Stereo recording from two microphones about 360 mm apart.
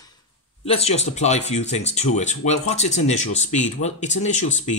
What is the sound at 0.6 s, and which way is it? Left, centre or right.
Speech, centre.